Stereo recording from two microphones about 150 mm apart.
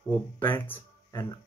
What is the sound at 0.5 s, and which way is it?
Speech, 15° left (ahead or behind).